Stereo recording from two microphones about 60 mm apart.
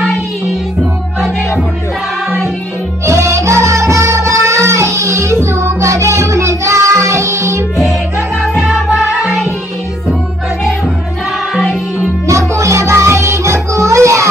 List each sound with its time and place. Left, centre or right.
3.1 s music: right
12.3 s music: right